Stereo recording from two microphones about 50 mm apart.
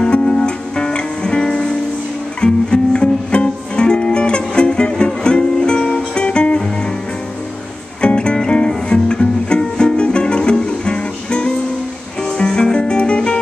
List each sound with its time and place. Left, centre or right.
0.0 s music: left
8.0 s music: centre